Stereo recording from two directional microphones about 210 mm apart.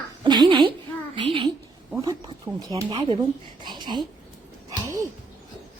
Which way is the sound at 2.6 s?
20° right (ahead or behind).